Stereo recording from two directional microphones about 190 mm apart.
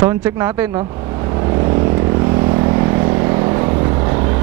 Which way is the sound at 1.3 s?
25° right (ahead or behind).